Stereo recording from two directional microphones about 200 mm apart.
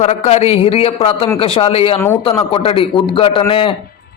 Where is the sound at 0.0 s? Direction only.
30° left (ahead or behind).